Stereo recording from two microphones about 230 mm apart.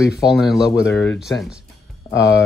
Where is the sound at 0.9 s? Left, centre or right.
Left.